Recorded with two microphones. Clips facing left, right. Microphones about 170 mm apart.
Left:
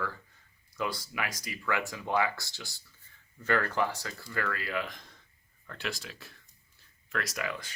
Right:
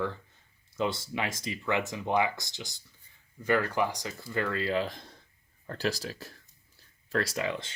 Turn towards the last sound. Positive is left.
turn(degrees=-30)  # may be behind; listen again after turning